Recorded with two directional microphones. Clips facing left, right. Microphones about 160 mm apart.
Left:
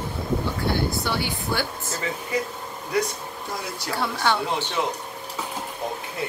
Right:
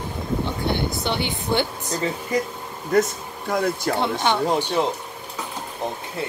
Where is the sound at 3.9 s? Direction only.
20° right (ahead or behind).